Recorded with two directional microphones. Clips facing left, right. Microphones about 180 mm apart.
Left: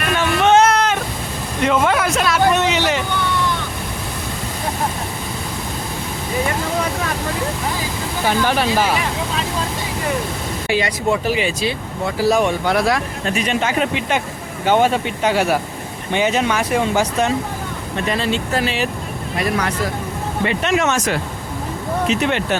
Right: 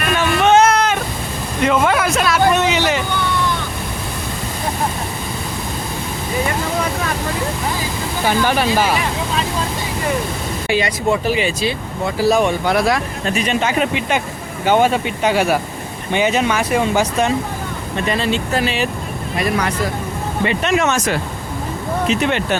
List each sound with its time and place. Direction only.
0.2 s a sound: 5° right (ahead or behind)
8.2 s speech: 10° right (ahead or behind)
10.7 s speech: 20° right (ahead or behind)
13.2 s speech: 30° right (ahead or behind); by 19.9 s 15° right (ahead or behind)
20.6 s speech: 45° right (ahead or behind)
22.1 s speech: 55° right (ahead or behind)